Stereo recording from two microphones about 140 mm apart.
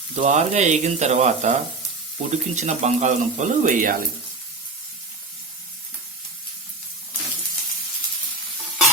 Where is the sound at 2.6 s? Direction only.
55° right (ahead or behind).